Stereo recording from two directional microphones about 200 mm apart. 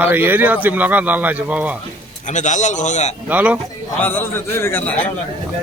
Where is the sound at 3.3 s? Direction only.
5° right (ahead or behind).